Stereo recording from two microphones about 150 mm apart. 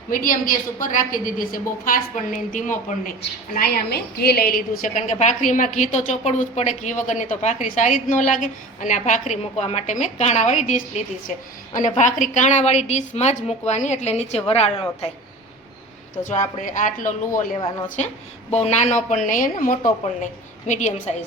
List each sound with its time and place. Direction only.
0.1 s a woman's voice: 70° left (ahead or behind)
3.5 s a woman's voice: 90° left; by 5.0 s 70° left (ahead or behind)
5.1 s a woman's voice: 50° left (ahead or behind)
16.6 s a woman's voice: 60° left (ahead or behind)
20.7 s a woman's voice: 50° left (ahead or behind)